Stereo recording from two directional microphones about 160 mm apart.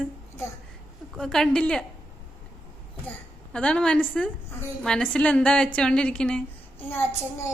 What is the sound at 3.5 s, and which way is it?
A woman's voice, 5° left (ahead or behind).